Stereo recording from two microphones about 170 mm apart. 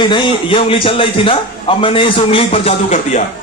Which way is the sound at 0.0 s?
30° left (ahead or behind).